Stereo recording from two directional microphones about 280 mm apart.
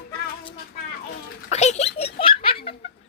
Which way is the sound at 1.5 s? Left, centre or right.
Left.